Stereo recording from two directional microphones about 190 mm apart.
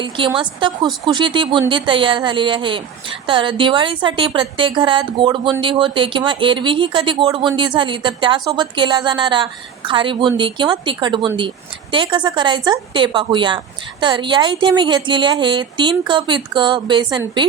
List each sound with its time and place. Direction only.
0.0 s a woman's voice: 25° right (ahead or behind)